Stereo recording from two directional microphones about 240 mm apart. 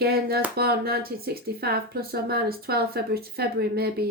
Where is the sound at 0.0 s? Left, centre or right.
Right.